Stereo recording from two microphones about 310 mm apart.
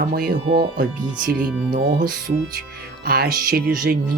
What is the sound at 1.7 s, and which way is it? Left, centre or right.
Speech, right.